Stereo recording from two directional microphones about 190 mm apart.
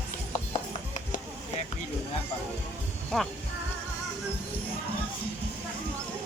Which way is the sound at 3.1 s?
5° left (ahead or behind).